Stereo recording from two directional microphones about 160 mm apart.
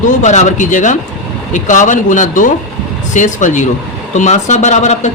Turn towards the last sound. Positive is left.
turn(degrees=50)  # may be behind; listen again after turning